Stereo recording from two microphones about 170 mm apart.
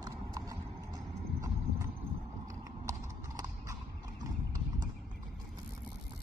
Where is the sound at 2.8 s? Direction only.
20° right (ahead or behind).